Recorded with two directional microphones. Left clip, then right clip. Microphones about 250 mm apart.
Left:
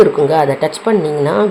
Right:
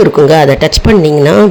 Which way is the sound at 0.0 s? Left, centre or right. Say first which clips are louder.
Right 5 dB; right.